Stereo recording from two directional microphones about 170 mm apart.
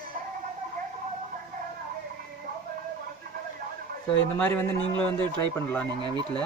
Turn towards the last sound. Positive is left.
turn(degrees=-25)  # may be behind; listen again after turning